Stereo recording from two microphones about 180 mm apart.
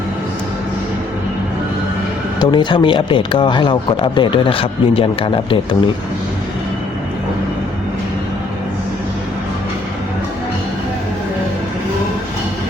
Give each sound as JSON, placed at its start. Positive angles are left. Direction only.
{"t": 2.4, "sound": "speech", "side_deg": 25}